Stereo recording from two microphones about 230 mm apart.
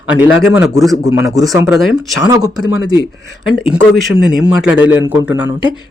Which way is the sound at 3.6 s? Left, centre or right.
Centre.